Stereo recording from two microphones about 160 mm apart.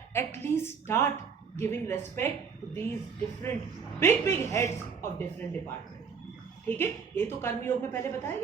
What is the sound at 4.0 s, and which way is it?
Speech, 15° left (ahead or behind).